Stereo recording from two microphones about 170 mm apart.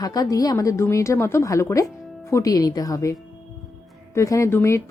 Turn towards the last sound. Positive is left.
turn(degrees=15)  # may be behind; listen again after turning